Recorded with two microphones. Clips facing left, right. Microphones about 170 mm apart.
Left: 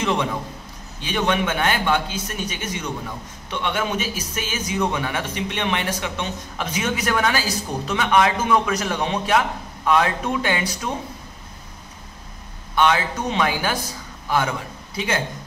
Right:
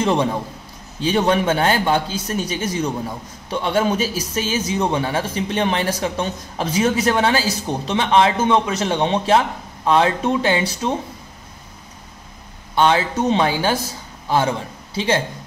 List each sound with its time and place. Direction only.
0.0 s a man's voice: 35° right (ahead or behind)
12.7 s a man's voice: 30° right (ahead or behind)